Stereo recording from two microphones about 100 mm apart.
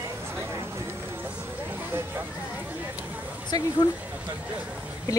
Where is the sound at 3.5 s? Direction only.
40° left (ahead or behind).